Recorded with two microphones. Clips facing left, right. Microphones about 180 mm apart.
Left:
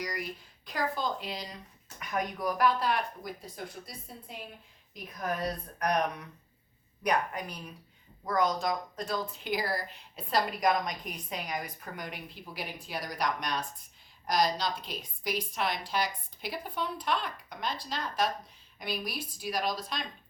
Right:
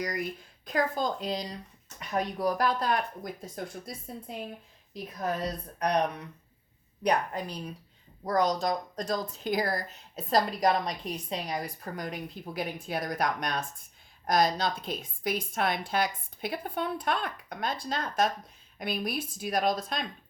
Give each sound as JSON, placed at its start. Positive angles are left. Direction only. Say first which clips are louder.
{"t": 0.6, "sound": "a woman's voice", "louder": "right 4 dB", "side_deg": -45}
{"t": 4.9, "sound": "a woman's voice", "louder": "right 2 dB", "side_deg": -25}